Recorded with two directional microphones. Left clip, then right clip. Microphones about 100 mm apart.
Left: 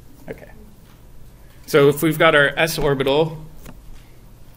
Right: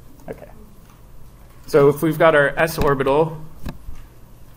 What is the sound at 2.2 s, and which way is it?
Speech, 45° left (ahead or behind).